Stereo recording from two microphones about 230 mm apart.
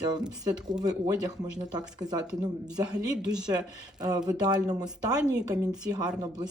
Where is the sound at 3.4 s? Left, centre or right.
Centre.